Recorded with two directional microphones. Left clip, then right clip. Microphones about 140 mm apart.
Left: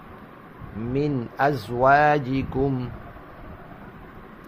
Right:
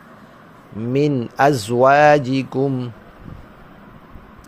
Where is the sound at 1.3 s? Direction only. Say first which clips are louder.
Right 7 dB; 55° right (ahead or behind); by 2.9 s 35° right (ahead or behind).